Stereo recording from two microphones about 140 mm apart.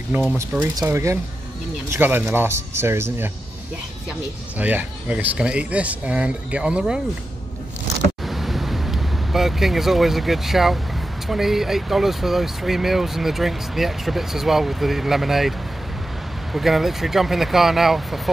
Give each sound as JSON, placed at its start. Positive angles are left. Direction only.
{"t": 0.4, "sound": "speech", "side_deg": -20}
{"t": 4.6, "sound": "speech", "side_deg": -10}
{"t": 8.3, "sound": "vehicle", "side_deg": 0}
{"t": 11.2, "sound": "speech", "side_deg": 0}
{"t": 16.5, "sound": "speech", "side_deg": 0}